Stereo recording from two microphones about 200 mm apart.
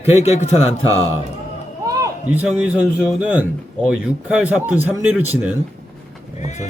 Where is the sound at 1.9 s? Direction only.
10° right (ahead or behind).